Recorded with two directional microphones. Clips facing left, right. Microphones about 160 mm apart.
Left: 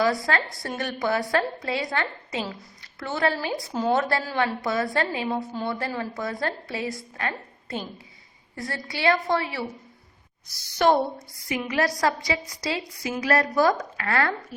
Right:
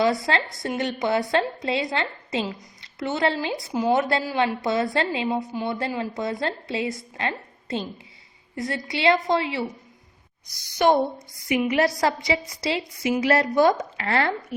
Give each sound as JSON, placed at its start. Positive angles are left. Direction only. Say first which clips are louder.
{"t": 0.0, "sound": "a woman's voice", "louder": "right 2 dB", "side_deg": -25}
{"t": 10.8, "sound": "a woman's voice", "louder": "right 1 dB", "side_deg": -10}